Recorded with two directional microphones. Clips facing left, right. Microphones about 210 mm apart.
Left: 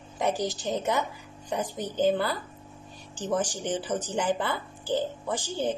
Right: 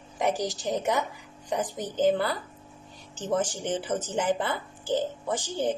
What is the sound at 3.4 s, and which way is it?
Speech, 15° left (ahead or behind).